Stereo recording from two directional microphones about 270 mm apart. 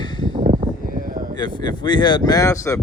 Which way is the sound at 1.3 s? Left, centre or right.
Centre.